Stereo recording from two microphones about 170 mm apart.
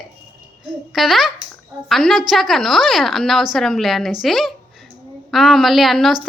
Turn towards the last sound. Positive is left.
turn(degrees=0)  # may be behind; listen again after turning